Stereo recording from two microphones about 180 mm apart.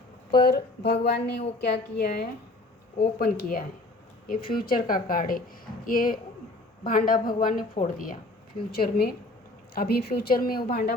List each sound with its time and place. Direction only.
0.3 s a woman's voice: 60° left (ahead or behind)